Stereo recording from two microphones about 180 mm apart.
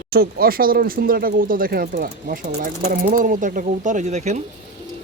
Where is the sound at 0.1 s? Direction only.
55° right (ahead or behind); by 4.4 s 40° right (ahead or behind).